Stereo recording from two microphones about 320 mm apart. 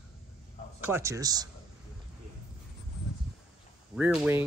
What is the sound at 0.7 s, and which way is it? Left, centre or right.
Speech, centre.